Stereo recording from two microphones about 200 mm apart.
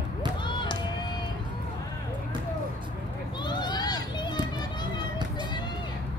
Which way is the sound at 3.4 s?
20° left (ahead or behind).